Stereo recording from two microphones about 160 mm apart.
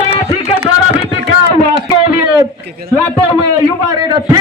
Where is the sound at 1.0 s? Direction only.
35° left (ahead or behind).